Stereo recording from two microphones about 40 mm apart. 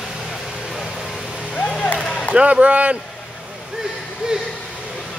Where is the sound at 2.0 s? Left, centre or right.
Centre.